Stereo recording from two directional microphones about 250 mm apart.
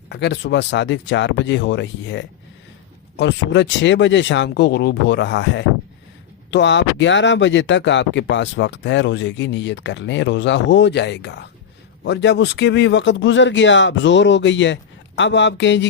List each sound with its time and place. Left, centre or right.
0.1 s speech: left